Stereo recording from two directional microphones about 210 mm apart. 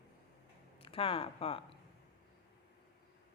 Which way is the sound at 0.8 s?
25° left (ahead or behind).